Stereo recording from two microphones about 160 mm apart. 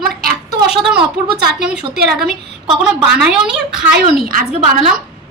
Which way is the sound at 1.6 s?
85° right.